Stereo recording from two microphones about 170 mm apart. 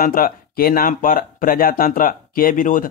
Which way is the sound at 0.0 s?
60° left (ahead or behind).